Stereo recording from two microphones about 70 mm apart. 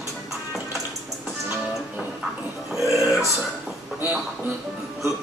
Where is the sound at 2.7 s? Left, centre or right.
Centre.